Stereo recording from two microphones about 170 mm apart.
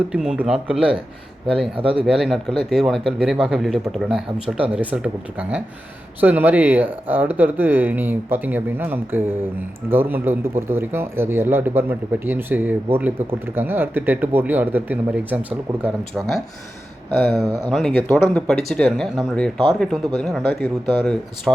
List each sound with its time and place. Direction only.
0.1 s speech: 5° right (ahead or behind)
1.7 s speech: 30° right (ahead or behind)
2.0 s a man's voice: centre (ahead or behind)